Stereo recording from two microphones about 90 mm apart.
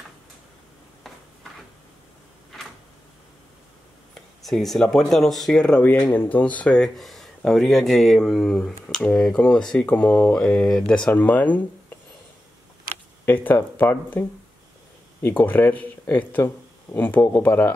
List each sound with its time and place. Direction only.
4.1 s a sound: 5° left (ahead or behind)
4.9 s speech: 5° left (ahead or behind)
13.2 s speech: 20° left (ahead or behind)
15.2 s speech: 20° left (ahead or behind)